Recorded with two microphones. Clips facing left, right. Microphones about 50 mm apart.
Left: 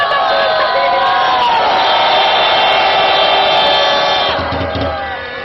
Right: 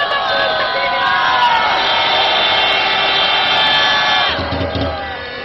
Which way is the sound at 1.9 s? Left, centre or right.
Centre.